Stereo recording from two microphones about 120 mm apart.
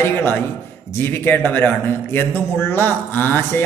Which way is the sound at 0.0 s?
20° left (ahead or behind).